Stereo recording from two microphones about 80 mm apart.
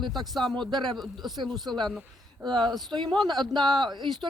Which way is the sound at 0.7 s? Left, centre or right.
Right.